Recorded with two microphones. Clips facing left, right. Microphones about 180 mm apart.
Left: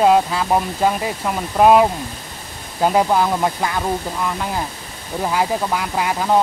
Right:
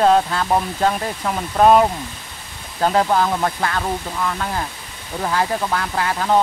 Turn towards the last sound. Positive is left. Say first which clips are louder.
# left 1 dB
turn(degrees=10)  # may be behind; listen again after turning